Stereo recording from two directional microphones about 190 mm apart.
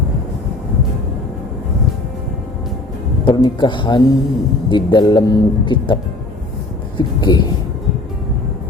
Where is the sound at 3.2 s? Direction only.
25° left (ahead or behind).